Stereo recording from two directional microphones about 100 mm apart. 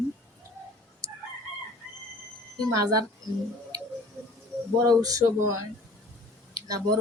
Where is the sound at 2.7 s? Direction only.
40° right (ahead or behind).